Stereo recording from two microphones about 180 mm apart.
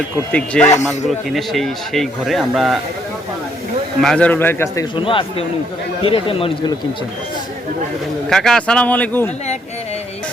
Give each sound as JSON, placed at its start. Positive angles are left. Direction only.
{"t": 0.3, "sound": "a man's voice", "side_deg": 5}
{"t": 4.0, "sound": "a man's voice", "side_deg": 5}
{"t": 4.9, "sound": "a man's voice", "side_deg": 30}
{"t": 8.3, "sound": "speech", "side_deg": 5}